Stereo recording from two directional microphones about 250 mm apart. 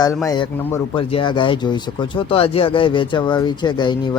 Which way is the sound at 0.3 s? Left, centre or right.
Centre.